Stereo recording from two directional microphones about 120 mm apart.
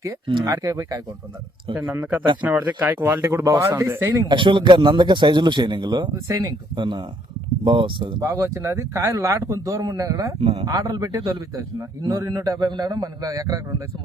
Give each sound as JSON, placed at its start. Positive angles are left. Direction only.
{"t": 0.4, "sound": "a man's voice", "side_deg": -30}
{"t": 1.9, "sound": "a man's voice", "side_deg": -15}
{"t": 4.3, "sound": "a man's voice", "side_deg": -40}
{"t": 8.2, "sound": "a man's voice", "side_deg": -25}
{"t": 10.4, "sound": "a man's voice", "side_deg": -55}
{"t": 10.7, "sound": "a man's voice", "side_deg": -30}